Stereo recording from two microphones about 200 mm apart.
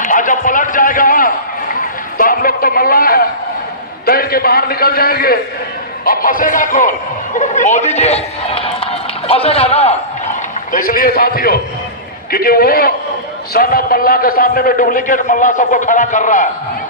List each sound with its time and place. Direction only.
0.0 s a sound: 40° left (ahead or behind)
4.0 s a man's voice: 50° left (ahead or behind); by 9.9 s 30° left (ahead or behind)
10.7 s a man's voice: 45° left (ahead or behind)